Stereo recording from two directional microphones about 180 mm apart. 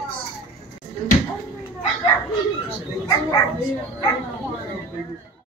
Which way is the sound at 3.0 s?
20° left (ahead or behind).